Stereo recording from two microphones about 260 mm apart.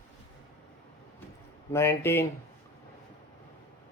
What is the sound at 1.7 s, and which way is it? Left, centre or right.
Speech, centre.